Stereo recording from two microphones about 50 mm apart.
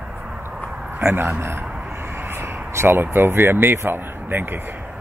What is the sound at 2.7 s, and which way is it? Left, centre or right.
Speech, right.